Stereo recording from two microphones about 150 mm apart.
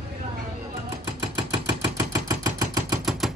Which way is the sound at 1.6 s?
20° right (ahead or behind).